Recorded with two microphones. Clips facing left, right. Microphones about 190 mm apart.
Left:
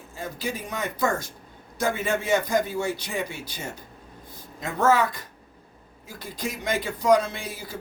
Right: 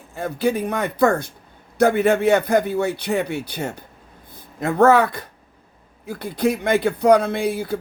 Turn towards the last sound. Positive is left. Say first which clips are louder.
# right 13 dB
turn(degrees=-60)  # may be behind; listen again after turning